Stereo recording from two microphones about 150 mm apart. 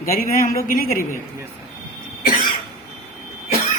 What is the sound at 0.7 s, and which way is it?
Speech, 70° left (ahead or behind).